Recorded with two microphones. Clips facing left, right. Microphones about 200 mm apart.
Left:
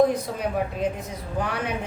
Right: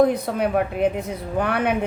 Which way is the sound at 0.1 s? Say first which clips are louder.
Right 5 dB; 60° right (ahead or behind).